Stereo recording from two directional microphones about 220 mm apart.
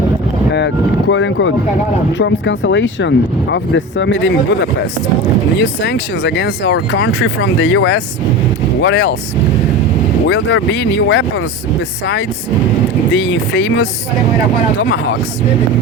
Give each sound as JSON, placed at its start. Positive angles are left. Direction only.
{"t": 0.5, "sound": "speech", "side_deg": 50}
{"t": 10.2, "sound": "speech", "side_deg": 60}
{"t": 13.1, "sound": "speech", "side_deg": 60}